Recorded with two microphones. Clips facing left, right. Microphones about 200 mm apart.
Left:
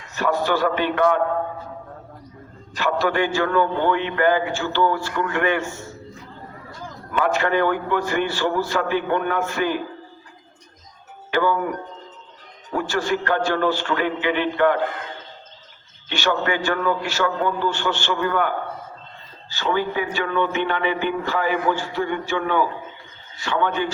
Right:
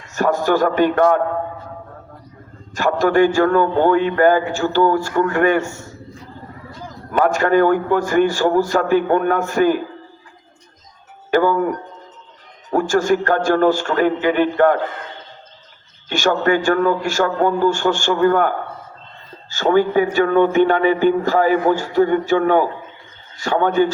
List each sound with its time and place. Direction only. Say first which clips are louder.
0.1 s speech: right 4 dB; 45° right (ahead or behind)
2.7 s speech: right 6 dB; 45° right (ahead or behind)
7.1 s speech: right 5 dB; 45° right (ahead or behind)
11.3 s speech: right 5 dB; 45° right (ahead or behind)
12.7 s speech: right 7 dB; 45° right (ahead or behind)
16.0 s speech: right 6 dB; 45° right (ahead or behind)